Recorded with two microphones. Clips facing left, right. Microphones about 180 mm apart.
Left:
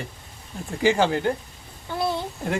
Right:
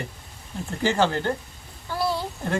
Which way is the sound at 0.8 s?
10° left (ahead or behind).